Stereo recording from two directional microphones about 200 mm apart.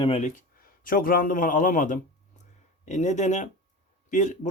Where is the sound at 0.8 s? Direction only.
45° left (ahead or behind).